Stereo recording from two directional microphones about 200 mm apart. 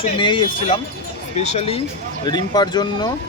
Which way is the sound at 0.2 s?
25° left (ahead or behind).